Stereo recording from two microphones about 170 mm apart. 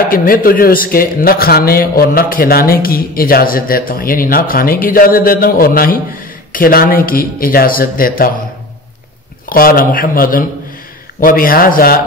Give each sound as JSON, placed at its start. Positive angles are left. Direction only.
{"t": 0.1, "sound": "a man's voice", "side_deg": 55}
{"t": 9.5, "sound": "a man's voice", "side_deg": 60}